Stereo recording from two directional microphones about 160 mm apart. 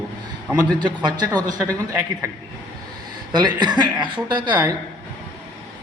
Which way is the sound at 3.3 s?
25° right (ahead or behind).